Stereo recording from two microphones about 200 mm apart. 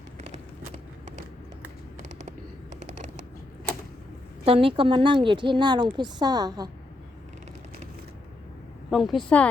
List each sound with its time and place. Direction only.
4.4 s speech: 30° right (ahead or behind)
8.9 s speech: centre (ahead or behind)